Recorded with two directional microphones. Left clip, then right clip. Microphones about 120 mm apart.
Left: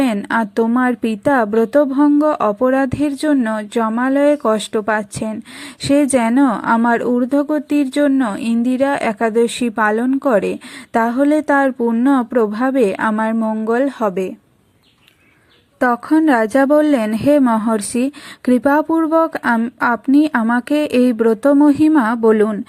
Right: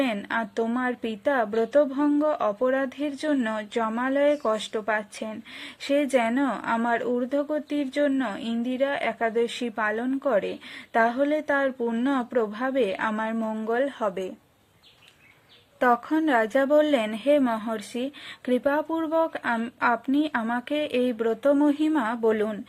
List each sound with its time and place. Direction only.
0.0 s a woman's voice: 40° left (ahead or behind)
15.8 s a woman's voice: 30° left (ahead or behind)